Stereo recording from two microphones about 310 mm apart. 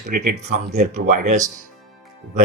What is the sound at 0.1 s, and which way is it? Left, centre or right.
Speech, right.